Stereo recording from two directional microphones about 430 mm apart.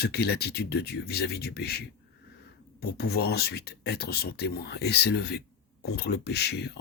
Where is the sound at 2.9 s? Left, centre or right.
Left.